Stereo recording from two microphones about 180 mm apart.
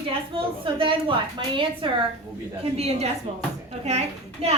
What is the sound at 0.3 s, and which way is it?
A woman's voice, 30° right (ahead or behind).